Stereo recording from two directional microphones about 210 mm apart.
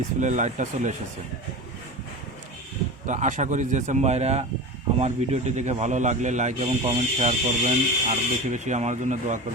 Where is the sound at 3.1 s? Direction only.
35° right (ahead or behind).